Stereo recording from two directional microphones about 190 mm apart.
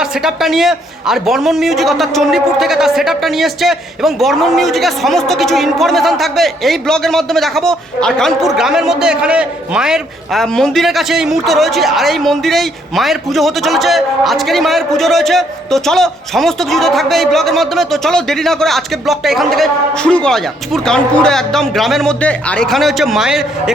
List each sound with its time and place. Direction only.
0.0 s a woman's voice: 5° right (ahead or behind)